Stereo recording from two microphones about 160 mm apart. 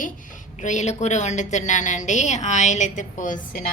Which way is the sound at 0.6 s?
50° left (ahead or behind).